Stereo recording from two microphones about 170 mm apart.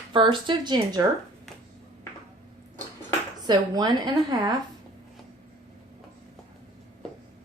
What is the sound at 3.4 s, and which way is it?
A woman's voice, 25° right (ahead or behind).